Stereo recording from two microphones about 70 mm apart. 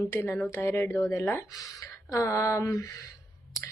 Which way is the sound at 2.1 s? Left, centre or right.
Left.